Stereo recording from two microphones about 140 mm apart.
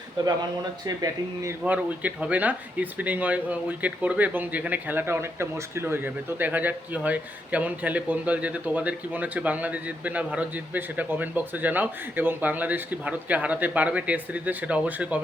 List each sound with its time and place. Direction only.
0.9 s speech: 25° right (ahead or behind)
1.6 s speech: 10° right (ahead or behind)